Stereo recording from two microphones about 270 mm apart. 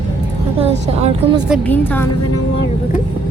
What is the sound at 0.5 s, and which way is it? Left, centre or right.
Speech, right.